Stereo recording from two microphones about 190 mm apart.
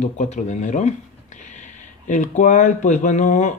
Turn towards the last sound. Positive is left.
turn(degrees=40)  # may be behind; listen again after turning